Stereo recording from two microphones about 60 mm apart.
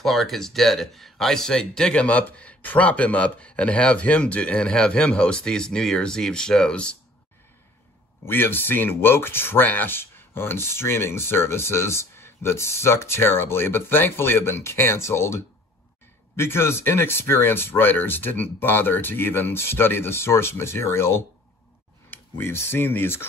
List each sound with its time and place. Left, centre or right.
0.0 s a man's voice: centre
8.3 s speech: left